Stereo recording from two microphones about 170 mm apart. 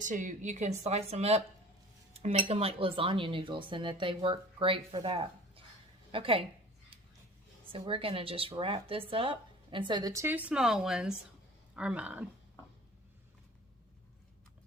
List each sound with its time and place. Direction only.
0.0 s dishes: 50° right (ahead or behind); by 5.6 s 30° right (ahead or behind)
6.1 s a woman's voice: 30° right (ahead or behind)
7.7 s dishes: 30° right (ahead or behind); by 11.1 s 5° right (ahead or behind)
11.7 s speech: 5° right (ahead or behind)